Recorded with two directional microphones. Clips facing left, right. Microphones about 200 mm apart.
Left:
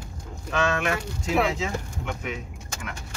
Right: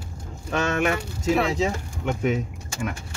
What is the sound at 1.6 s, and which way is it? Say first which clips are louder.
Speech: right 5 dB; 40° right (ahead or behind).